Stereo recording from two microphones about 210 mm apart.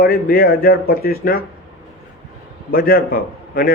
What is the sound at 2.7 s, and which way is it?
Speech, 45° left (ahead or behind).